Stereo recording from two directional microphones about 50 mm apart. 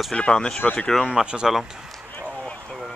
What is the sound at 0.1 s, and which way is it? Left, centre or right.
Speech, centre.